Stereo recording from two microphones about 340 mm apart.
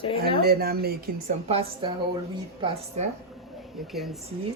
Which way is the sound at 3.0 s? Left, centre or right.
Centre.